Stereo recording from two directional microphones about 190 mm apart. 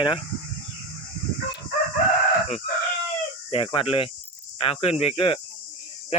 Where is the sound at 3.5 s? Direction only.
30° left (ahead or behind).